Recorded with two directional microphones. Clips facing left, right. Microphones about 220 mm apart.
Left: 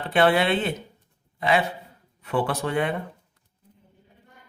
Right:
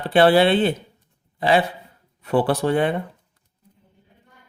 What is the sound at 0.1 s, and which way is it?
Speech, 35° right (ahead or behind).